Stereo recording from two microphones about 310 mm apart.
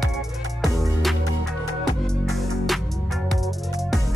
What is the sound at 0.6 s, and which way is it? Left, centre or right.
Music, centre.